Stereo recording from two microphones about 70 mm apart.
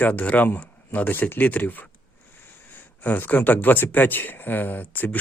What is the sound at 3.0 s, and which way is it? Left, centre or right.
Speech, left.